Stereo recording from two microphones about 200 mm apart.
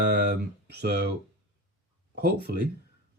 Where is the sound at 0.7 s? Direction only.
55° right (ahead or behind).